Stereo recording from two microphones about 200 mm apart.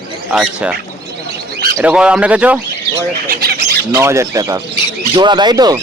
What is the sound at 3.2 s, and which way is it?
Squawk, 50° right (ahead or behind).